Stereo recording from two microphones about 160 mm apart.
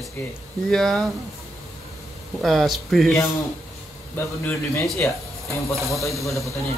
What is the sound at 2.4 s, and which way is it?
Speech, centre (ahead or behind).